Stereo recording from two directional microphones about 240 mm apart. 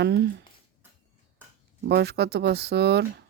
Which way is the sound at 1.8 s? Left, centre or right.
Right.